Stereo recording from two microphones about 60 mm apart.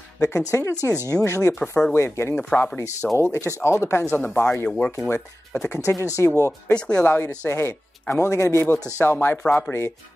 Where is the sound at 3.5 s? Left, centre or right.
Left.